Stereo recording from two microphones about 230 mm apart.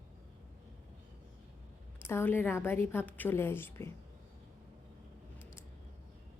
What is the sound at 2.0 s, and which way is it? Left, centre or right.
A woman's voice, centre.